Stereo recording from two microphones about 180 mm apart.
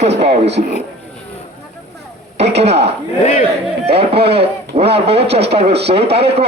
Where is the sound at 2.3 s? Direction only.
35° right (ahead or behind).